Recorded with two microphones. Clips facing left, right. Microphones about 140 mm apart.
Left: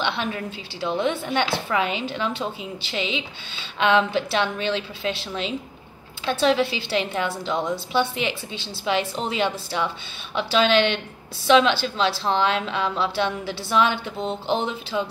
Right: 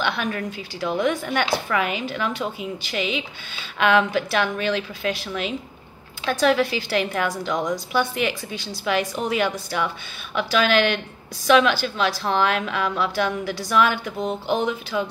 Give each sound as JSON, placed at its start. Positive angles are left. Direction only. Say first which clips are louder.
{"t": 0.0, "sound": "a woman's voice", "louder": "right 1 dB", "side_deg": 25}